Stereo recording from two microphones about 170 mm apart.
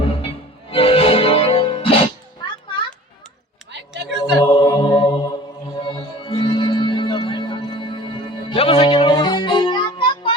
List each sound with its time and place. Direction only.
0.7 s music: 35° left (ahead or behind)
3.7 s a sound: 90° right
4.4 s a capella: 25° left (ahead or behind)
5.8 s music: 30° left (ahead or behind)